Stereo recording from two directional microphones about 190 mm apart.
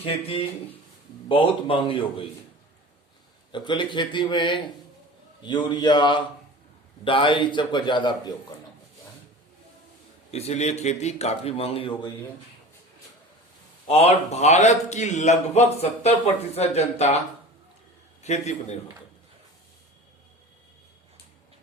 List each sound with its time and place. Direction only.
0.0 s a man's voice: 30° left (ahead or behind)
3.5 s a man's voice: 25° left (ahead or behind)
10.3 s a man's voice: 35° left (ahead or behind)
13.8 s a man's voice: 30° left (ahead or behind)
18.2 s a man's voice: 35° left (ahead or behind)